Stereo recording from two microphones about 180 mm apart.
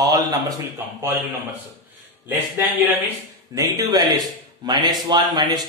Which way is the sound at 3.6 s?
20° right (ahead or behind).